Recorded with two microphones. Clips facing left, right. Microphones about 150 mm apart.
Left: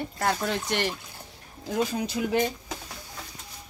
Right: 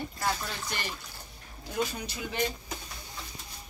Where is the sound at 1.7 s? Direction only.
90° left.